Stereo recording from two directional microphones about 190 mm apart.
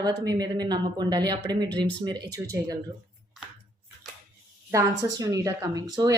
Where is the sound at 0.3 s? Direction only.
20° right (ahead or behind).